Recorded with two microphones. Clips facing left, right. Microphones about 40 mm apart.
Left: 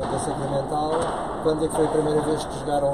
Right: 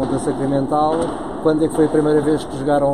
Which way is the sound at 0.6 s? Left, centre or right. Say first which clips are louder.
Right 7 dB; right.